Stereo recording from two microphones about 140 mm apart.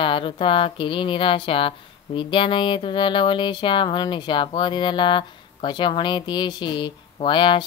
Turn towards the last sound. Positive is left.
turn(degrees=35)  # may be behind; listen again after turning